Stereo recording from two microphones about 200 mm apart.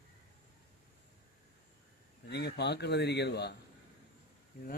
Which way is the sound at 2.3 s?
55° left (ahead or behind).